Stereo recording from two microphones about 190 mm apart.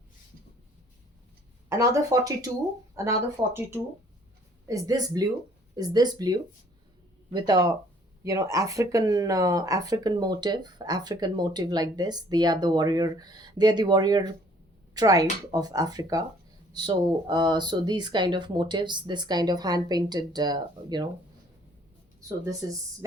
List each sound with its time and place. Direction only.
1.7 s speech: 15° right (ahead or behind)